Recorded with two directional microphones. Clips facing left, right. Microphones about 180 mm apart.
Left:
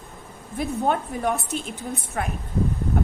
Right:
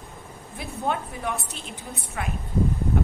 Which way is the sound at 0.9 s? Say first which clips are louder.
Left 3 dB; 50° left (ahead or behind).